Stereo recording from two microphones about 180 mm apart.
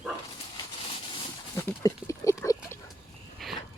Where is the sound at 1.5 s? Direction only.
15° left (ahead or behind).